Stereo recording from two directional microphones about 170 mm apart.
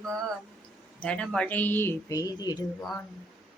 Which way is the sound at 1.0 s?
5° left (ahead or behind).